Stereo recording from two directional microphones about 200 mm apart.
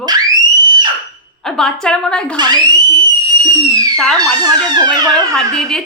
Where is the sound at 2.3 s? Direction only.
20° right (ahead or behind).